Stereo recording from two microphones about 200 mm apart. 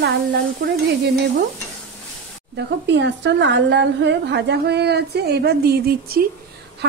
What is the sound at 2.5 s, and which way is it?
Speech, 60° right (ahead or behind).